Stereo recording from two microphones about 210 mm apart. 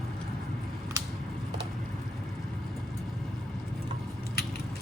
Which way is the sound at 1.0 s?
15° right (ahead or behind).